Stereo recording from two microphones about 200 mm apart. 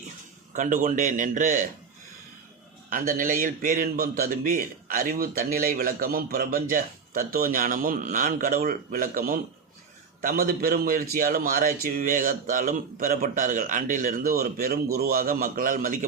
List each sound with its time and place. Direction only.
0.5 s a man's voice: 40° right (ahead or behind)
2.9 s a man's voice: 45° right (ahead or behind)